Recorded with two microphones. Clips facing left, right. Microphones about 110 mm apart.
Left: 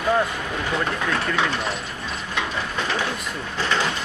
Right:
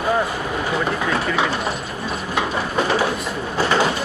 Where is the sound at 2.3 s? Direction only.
45° right (ahead or behind).